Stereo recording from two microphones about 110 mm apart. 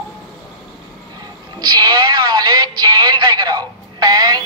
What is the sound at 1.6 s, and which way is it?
Music, 40° right (ahead or behind).